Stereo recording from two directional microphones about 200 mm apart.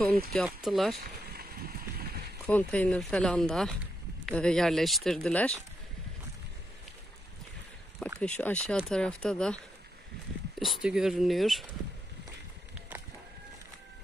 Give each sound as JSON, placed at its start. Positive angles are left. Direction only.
{"t": 0.3, "sound": "speech", "side_deg": 0}
{"t": 1.0, "sound": "a sound", "side_deg": -50}
{"t": 2.4, "sound": "speech", "side_deg": 5}
{"t": 8.2, "sound": "speech", "side_deg": 5}
{"t": 10.6, "sound": "speech", "side_deg": 0}